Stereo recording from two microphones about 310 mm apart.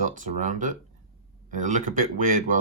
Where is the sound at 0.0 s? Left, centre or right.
Right.